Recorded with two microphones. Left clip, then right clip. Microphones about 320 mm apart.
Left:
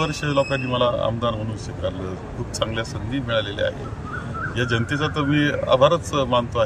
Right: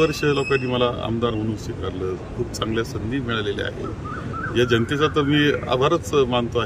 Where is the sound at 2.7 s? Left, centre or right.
Centre.